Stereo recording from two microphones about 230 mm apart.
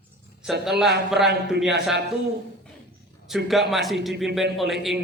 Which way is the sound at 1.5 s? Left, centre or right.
Centre.